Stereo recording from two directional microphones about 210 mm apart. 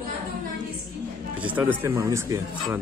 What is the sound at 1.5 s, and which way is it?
Speech, 10° right (ahead or behind).